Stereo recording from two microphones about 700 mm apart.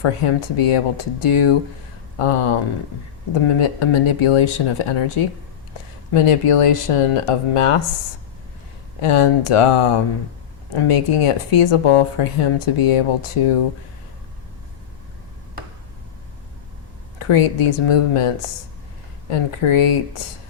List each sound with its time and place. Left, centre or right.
0.0 s speech: left
9.0 s speech: left
17.2 s speech: left
19.3 s speech: left